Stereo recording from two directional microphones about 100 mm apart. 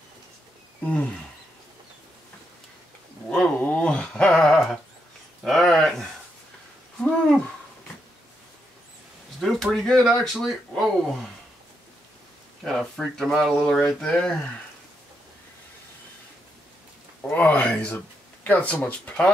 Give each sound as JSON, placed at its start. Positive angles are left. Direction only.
{"t": 0.8, "sound": "speech", "side_deg": 10}
{"t": 3.3, "sound": "a sound", "side_deg": 10}
{"t": 9.4, "sound": "speech", "side_deg": 0}
{"t": 12.6, "sound": "speech", "side_deg": 5}
{"t": 17.2, "sound": "speech", "side_deg": 15}